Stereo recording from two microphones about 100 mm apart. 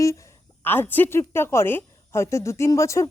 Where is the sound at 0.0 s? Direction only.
30° left (ahead or behind).